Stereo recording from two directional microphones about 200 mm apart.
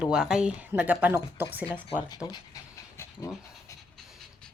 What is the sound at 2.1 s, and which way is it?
Speech, 20° left (ahead or behind).